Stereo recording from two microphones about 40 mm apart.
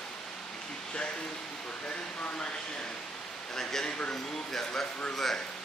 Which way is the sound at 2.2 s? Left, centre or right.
Left.